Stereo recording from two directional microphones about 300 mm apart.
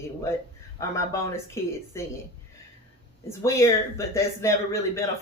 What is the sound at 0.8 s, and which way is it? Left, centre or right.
Speech, centre.